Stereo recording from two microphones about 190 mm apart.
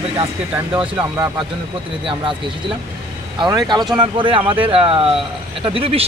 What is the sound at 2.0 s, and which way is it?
Speech, 25° right (ahead or behind).